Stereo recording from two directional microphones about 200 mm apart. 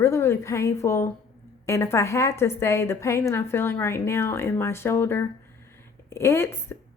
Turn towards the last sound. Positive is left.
turn(degrees=10)  # may be behind; listen again after turning